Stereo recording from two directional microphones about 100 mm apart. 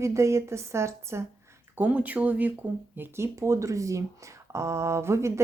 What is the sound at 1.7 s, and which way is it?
Speech, 15° right (ahead or behind).